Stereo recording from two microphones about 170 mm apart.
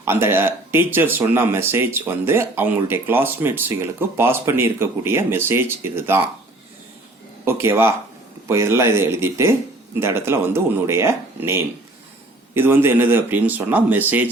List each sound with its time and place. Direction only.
0.0 s speech: 15° right (ahead or behind)
7.4 s speech: 15° right (ahead or behind)